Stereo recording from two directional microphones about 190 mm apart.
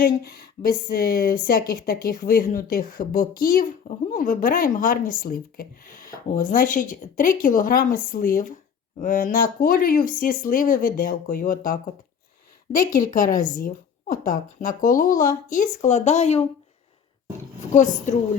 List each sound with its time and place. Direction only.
0.0 s speech: 50° left (ahead or behind); by 16.5 s 35° left (ahead or behind)
17.7 s a woman's voice: 40° left (ahead or behind)